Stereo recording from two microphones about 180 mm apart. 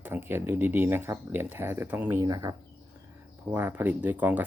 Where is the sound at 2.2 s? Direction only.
20° right (ahead or behind).